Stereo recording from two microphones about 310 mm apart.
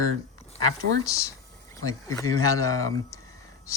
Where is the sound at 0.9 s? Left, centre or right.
Right.